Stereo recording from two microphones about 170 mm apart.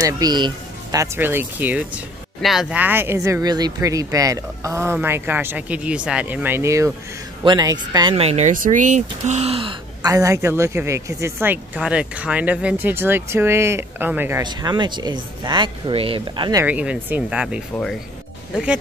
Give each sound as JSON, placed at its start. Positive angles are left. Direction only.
{"t": 0.0, "sound": "speech", "side_deg": -25}
{"t": 10.0, "sound": "speech", "side_deg": -20}
{"t": 14.4, "sound": "speech", "side_deg": -25}
{"t": 16.6, "sound": "speech", "side_deg": -10}